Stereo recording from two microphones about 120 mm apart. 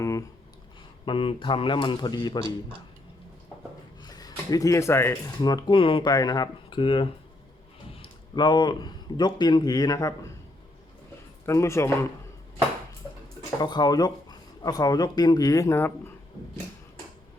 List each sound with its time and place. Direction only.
0.0 s speech: 25° left (ahead or behind)
1.0 s speech: 45° left (ahead or behind)
4.0 s a sound: 35° left (ahead or behind)
5.4 s speech: 35° left (ahead or behind)
11.4 s speech: 25° left (ahead or behind)
13.6 s speech: 35° left (ahead or behind); by 16.1 s 20° left (ahead or behind)